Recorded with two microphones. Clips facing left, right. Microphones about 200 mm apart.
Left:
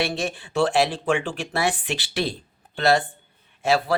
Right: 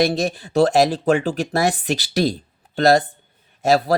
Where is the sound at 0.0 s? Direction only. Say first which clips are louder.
Right 7 dB; 40° right (ahead or behind).